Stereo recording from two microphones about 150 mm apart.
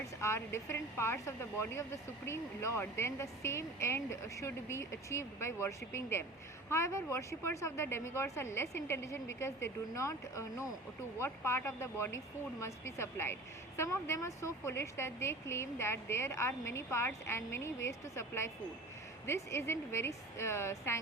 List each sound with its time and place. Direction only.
0.2 s speech: 15° left (ahead or behind)